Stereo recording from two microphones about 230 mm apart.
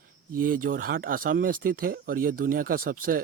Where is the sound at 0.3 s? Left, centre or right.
Right.